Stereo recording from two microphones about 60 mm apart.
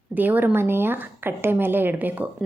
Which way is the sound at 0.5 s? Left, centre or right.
Right.